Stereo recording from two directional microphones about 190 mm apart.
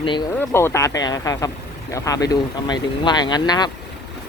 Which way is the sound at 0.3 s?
15° left (ahead or behind).